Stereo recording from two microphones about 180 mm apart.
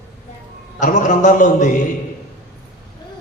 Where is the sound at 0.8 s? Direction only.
45° left (ahead or behind).